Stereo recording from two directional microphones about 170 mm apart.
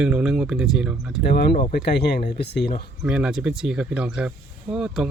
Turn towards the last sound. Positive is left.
turn(degrees=-5)  # may be behind; listen again after turning